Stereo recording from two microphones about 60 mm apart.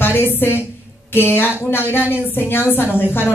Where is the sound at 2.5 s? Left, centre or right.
Left.